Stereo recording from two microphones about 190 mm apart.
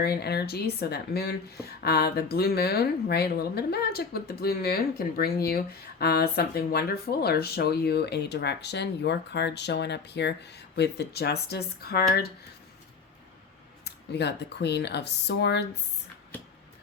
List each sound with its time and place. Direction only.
0.0 s speech: 60° left (ahead or behind)
13.8 s speech: 60° left (ahead or behind)